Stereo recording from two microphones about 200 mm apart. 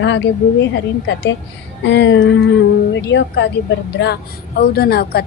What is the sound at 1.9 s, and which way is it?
A woman's voice, 60° left (ahead or behind).